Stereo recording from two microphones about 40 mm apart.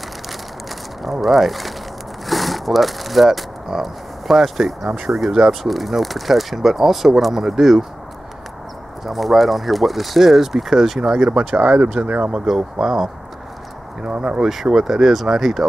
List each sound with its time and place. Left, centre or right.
1.2 s speech: centre
9.0 s speech: centre
11.1 s speech: right
12.3 s speech: centre
14.0 s speech: right
14.4 s speech: centre